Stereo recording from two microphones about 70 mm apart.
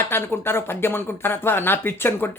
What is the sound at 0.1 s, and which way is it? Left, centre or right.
Speech, left.